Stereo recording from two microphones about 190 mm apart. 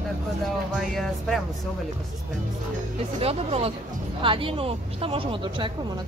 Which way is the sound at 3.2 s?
30° right (ahead or behind).